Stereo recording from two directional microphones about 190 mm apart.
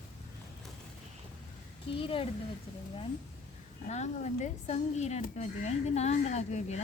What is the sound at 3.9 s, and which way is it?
Speech, 40° left (ahead or behind).